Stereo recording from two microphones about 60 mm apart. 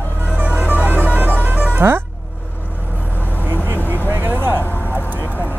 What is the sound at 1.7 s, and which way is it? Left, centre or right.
Speech, right.